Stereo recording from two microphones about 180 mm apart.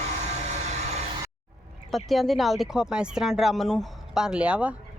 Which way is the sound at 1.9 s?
Centre (ahead or behind).